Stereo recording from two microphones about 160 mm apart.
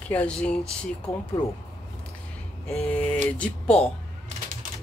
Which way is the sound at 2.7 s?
5° left (ahead or behind).